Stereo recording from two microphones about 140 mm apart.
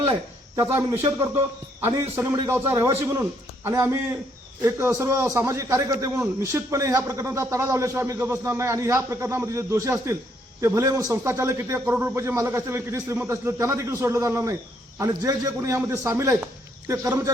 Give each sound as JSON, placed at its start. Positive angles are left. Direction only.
{"t": 0.5, "sound": "a man's voice", "side_deg": -20}